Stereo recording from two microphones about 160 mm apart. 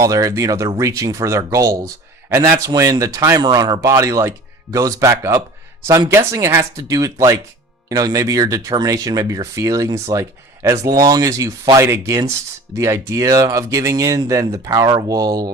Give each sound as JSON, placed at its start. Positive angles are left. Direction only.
{"t": 0.0, "sound": "speech", "side_deg": -20}